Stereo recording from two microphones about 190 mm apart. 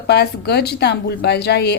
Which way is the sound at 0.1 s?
60° left (ahead or behind).